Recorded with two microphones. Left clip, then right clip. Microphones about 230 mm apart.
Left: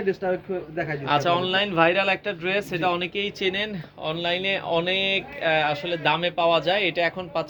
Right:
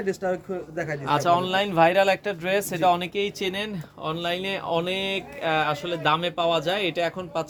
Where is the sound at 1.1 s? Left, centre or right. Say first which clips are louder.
Right 1 dB; right.